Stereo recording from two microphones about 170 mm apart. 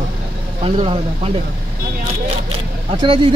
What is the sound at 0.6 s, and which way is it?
Speech, 35° right (ahead or behind).